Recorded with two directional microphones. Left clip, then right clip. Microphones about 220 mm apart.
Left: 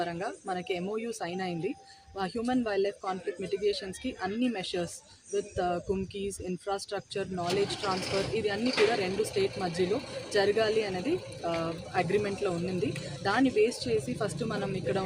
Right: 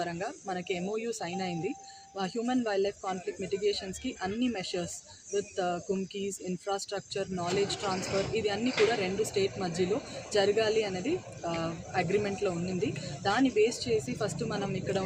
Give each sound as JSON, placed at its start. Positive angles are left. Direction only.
{"t": 0.0, "sound": "speech", "side_deg": 5}
{"t": 8.6, "sound": "speech", "side_deg": 50}
{"t": 9.3, "sound": "speech", "side_deg": 5}